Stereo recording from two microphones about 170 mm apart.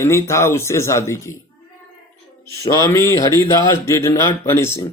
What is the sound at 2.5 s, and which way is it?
Speech, 20° left (ahead or behind).